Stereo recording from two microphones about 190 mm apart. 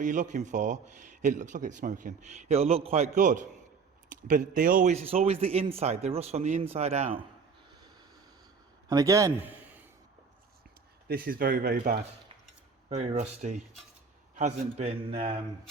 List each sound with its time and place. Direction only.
0.0 s a man's voice: 40° right (ahead or behind)
8.9 s a man's voice: 15° right (ahead or behind)
11.1 s speech: 50° right (ahead or behind)
12.9 s a man's voice: 40° right (ahead or behind)